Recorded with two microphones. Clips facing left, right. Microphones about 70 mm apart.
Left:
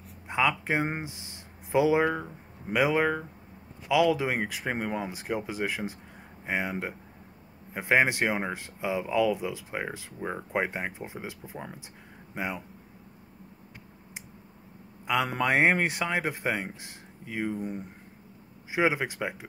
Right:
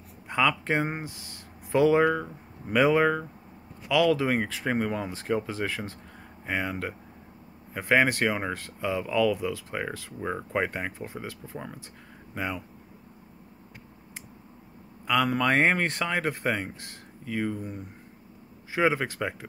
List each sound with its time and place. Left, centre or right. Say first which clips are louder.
0.3 s speech: right 1 dB; centre
0.8 s speech: even; left
15.4 s speech: even; centre
18.7 s speech: right 1 dB; centre